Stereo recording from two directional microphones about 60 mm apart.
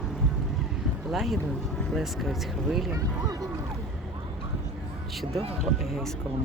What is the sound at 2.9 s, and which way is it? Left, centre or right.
Speech, right.